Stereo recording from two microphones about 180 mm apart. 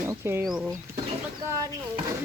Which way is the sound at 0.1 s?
15° right (ahead or behind).